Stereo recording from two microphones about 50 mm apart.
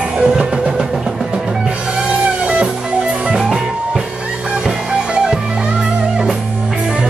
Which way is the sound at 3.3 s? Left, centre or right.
Centre.